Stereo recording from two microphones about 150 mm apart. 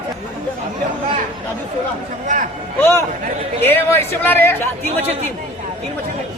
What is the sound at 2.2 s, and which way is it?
Speech, 60° right (ahead or behind).